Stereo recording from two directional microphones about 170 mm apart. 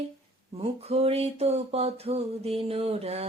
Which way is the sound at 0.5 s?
35° right (ahead or behind).